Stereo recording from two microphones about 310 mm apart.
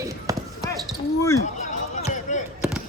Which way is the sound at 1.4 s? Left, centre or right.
Left.